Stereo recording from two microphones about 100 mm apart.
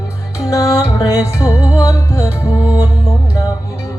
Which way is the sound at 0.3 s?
30° left (ahead or behind).